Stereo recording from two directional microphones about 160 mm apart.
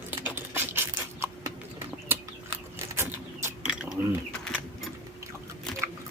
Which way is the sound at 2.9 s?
15° right (ahead or behind).